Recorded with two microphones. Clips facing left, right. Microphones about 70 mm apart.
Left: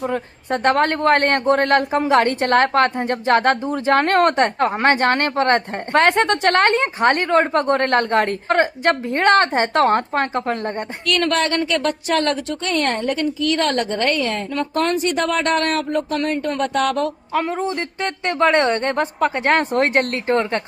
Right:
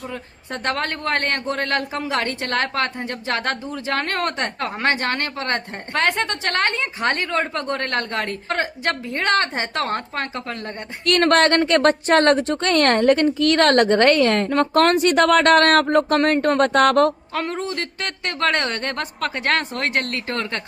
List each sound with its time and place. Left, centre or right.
0.0 s a woman's voice: left
11.0 s a woman's voice: right
17.3 s speech: centre
17.6 s a woman's voice: left
19.5 s a woman's voice: left